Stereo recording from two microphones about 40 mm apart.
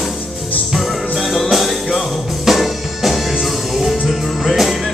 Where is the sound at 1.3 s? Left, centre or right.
Centre.